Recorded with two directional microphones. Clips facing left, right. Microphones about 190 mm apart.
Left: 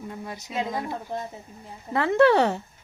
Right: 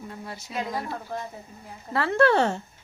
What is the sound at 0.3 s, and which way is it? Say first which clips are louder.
Speech: left 2 dB; 20° left (ahead or behind).